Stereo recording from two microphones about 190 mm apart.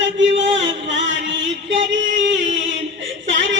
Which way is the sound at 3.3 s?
80° right.